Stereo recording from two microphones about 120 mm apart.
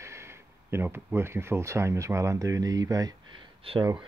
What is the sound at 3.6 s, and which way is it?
Speech, 50° right (ahead or behind).